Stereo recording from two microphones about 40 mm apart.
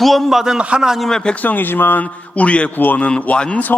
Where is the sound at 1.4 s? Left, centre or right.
Left.